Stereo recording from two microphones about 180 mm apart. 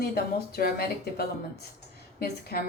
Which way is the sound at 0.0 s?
60° left (ahead or behind).